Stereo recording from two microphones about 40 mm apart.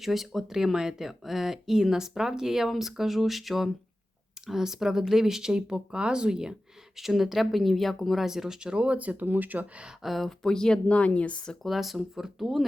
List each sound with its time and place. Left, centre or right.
0.0 s speech: centre
6.9 s speech: centre
8.7 s speech: right
9.0 s speech: right
10.0 s speech: centre
10.2 s speech: centre
10.8 s speech: left
11.6 s speech: centre